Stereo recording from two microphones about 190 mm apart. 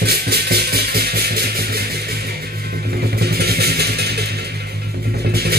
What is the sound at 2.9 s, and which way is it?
Vehicle, 55° right (ahead or behind).